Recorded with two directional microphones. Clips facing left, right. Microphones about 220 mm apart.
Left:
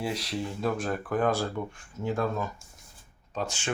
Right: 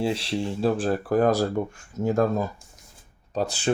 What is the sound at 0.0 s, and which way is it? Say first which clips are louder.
Speech: right 6 dB; 30° right (ahead or behind).